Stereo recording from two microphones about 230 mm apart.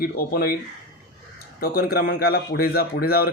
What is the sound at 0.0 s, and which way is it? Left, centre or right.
Speech, left.